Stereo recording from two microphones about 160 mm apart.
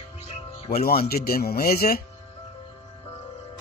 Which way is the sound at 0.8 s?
65° left (ahead or behind).